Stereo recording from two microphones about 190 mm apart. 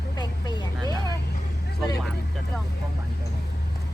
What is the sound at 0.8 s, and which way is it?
Speech, 20° right (ahead or behind).